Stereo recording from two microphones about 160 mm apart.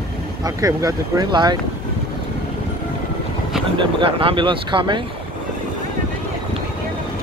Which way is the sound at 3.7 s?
35° right (ahead or behind).